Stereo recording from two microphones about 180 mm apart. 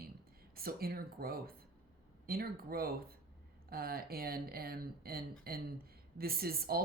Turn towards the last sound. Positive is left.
turn(degrees=-55)  # may be behind; listen again after turning